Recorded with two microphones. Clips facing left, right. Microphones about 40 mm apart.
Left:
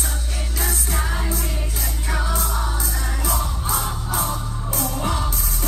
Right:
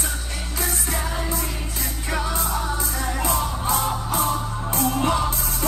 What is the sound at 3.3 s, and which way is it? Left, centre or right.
Music, right.